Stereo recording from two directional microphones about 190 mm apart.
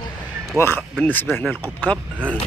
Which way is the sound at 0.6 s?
10° left (ahead or behind).